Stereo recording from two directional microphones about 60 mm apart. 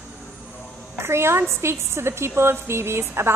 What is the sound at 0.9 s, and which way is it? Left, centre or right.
A woman's voice, right.